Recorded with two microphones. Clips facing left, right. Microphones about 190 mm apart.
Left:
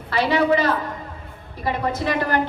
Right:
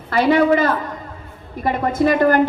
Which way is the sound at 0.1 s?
50° right (ahead or behind).